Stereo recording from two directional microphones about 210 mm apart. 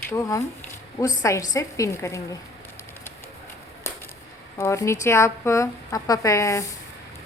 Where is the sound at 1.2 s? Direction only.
15° left (ahead or behind).